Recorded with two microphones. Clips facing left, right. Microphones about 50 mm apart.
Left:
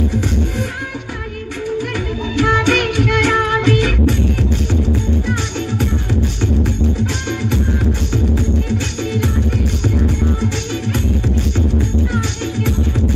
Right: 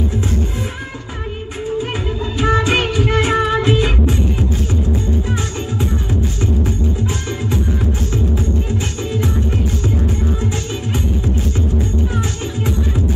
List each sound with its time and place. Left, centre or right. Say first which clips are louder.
2.3 s music: left 2 dB; left
7.2 s music: left 1 dB; left
12.1 s music: left 2 dB; left